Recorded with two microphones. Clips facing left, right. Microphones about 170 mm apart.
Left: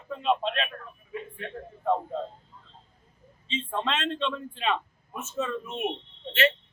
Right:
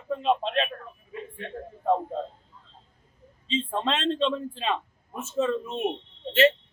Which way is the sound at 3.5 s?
35° right (ahead or behind).